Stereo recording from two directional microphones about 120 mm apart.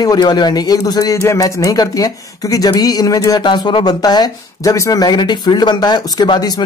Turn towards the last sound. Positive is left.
turn(degrees=35)  # may be behind; listen again after turning